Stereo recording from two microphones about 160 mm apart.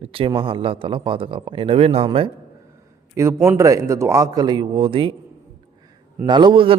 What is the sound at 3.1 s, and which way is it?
A man's voice, 20° right (ahead or behind).